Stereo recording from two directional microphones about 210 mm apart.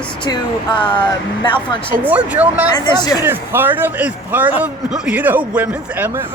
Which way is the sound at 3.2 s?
10° right (ahead or behind).